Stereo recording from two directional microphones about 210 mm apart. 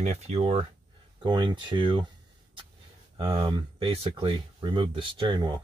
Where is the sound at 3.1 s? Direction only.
20° right (ahead or behind).